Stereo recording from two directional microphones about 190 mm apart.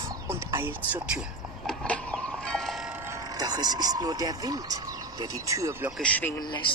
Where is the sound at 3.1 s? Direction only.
20° right (ahead or behind).